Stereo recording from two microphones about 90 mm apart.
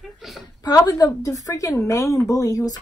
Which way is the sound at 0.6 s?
50° left (ahead or behind).